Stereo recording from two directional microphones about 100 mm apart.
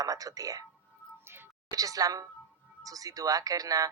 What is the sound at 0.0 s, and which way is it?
Speech, 35° right (ahead or behind).